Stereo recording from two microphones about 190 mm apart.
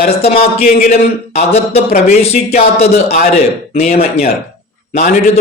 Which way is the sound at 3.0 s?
50° left (ahead or behind).